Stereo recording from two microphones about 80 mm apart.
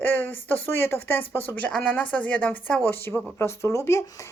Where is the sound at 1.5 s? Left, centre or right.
Centre.